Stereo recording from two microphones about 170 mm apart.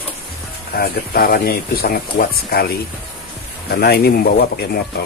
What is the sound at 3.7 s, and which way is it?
Speech, 65° left (ahead or behind).